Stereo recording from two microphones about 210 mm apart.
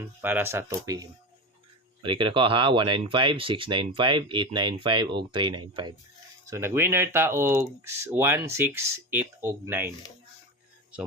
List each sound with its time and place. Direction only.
0.2 s speech: 10° right (ahead or behind)
2.0 s speech: 25° right (ahead or behind)